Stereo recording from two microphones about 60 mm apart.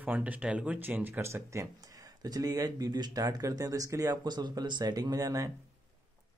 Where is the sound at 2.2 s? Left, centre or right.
Right.